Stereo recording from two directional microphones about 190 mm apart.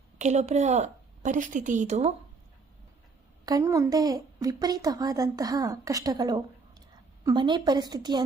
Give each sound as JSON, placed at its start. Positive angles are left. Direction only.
{"t": 0.2, "sound": "a woman's voice", "side_deg": -35}
{"t": 3.4, "sound": "a woman's voice", "side_deg": -15}